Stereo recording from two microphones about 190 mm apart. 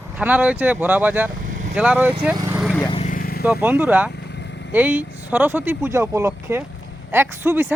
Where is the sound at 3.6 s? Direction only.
10° right (ahead or behind).